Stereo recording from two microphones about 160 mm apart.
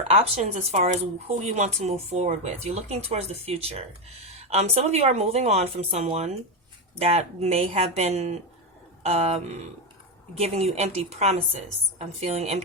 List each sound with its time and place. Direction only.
0.1 s speech: 40° right (ahead or behind)
10.4 s speech: 40° right (ahead or behind)